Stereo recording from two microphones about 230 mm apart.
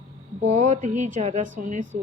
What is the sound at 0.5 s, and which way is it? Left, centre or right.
A woman's voice, right.